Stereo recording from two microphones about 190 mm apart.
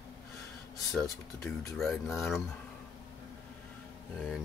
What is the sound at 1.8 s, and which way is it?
Speech, centre (ahead or behind).